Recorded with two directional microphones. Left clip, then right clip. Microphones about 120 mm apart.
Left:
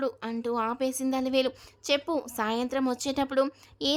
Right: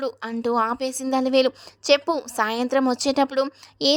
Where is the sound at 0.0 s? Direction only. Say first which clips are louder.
Right 5 dB; 45° right (ahead or behind).